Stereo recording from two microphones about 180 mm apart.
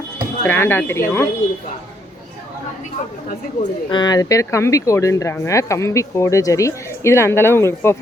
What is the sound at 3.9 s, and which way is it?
Speech, 20° left (ahead or behind).